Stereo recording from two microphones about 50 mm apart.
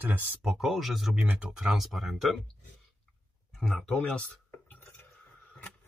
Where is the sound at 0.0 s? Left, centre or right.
Right.